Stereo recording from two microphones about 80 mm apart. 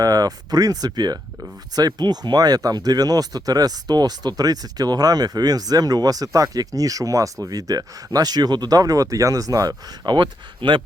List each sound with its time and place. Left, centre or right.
0.0 s speech: right
10.2 s speech: right